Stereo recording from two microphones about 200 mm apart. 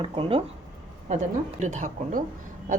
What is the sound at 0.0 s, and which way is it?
A woman's voice, 25° right (ahead or behind).